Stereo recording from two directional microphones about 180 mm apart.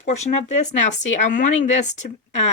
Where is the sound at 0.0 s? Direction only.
40° left (ahead or behind).